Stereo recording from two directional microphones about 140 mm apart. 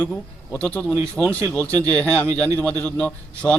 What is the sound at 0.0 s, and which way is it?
A man's voice, 10° left (ahead or behind).